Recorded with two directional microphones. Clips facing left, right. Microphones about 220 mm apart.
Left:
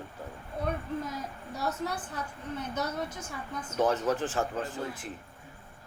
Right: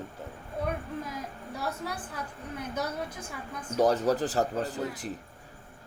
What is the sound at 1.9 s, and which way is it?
Speech, 10° right (ahead or behind).